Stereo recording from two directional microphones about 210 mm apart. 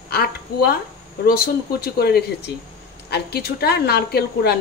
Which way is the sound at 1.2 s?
45° left (ahead or behind).